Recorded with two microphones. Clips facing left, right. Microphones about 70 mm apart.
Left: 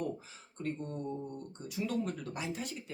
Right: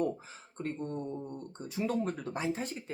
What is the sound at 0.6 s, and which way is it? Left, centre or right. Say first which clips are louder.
Speech: right 2 dB; right.